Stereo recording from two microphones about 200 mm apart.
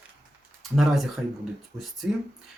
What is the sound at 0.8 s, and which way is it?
Speech, centre (ahead or behind).